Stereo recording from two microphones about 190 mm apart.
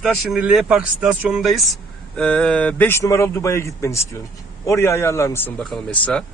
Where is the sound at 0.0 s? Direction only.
Centre (ahead or behind).